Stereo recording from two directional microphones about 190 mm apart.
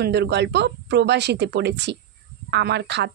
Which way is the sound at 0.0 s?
60° right (ahead or behind).